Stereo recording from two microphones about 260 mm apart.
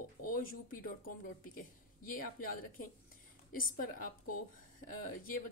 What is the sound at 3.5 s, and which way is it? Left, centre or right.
Speech, left.